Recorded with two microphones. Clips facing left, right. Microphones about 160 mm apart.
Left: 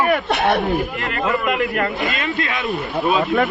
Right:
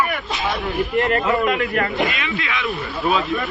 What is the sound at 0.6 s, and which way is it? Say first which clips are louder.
Speech: left 2 dB; 45° left (ahead or behind).